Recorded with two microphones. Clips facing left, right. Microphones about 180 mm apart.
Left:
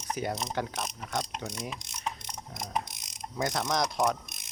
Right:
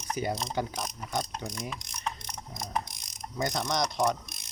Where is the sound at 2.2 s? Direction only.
25° left (ahead or behind).